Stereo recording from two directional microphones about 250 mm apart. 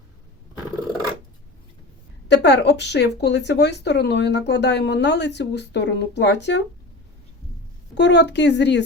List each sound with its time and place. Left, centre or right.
2.2 s speech: left
7.9 s speech: left